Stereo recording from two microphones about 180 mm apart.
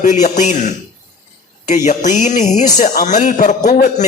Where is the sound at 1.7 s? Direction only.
40° left (ahead or behind).